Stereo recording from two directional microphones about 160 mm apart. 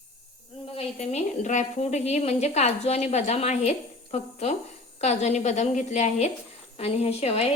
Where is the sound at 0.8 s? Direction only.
45° left (ahead or behind).